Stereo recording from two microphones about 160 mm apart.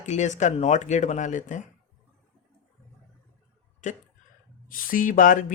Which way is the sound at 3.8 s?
50° left (ahead or behind).